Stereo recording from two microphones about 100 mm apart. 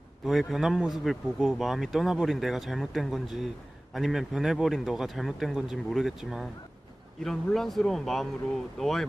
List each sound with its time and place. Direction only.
0.3 s speech: centre (ahead or behind)